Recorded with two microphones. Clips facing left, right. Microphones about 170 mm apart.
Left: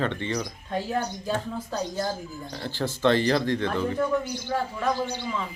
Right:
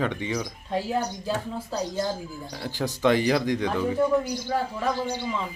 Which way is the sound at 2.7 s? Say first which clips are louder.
Even; 15° right (ahead or behind).